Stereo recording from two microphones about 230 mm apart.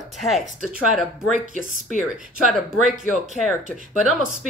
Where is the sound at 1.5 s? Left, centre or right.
Right.